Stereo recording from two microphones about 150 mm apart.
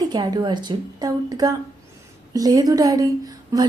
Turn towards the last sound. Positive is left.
turn(degrees=-25)  # may be behind; listen again after turning